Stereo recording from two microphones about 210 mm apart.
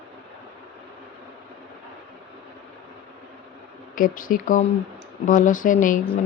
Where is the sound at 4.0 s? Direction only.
40° left (ahead or behind).